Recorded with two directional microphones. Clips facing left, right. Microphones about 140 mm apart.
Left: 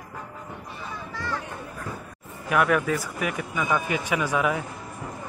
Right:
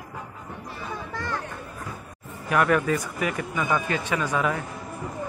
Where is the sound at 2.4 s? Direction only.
5° left (ahead or behind).